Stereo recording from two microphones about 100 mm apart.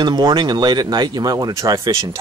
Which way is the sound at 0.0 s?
45° right (ahead or behind).